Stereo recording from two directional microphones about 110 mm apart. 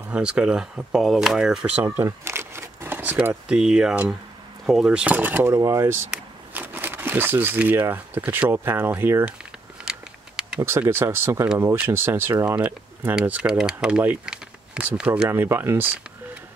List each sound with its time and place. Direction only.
0.1 s speech: 10° right (ahead or behind)
1.9 s speech: 25° right (ahead or behind)
5.5 s speech: 30° right (ahead or behind)
9.8 s a sound: 5° right (ahead or behind)
10.6 s speech: 20° right (ahead or behind)
12.5 s speech: 10° right (ahead or behind)
15.2 s speech: 20° right (ahead or behind)